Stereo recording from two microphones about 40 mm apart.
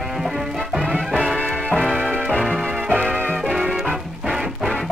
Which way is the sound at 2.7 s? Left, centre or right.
Right.